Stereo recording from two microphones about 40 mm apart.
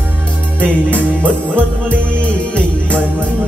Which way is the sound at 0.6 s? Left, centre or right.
Left.